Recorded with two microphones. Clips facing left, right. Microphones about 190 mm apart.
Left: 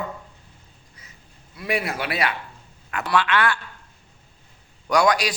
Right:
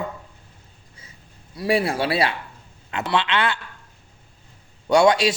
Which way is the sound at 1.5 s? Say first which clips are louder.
Right 5 dB; 30° right (ahead or behind).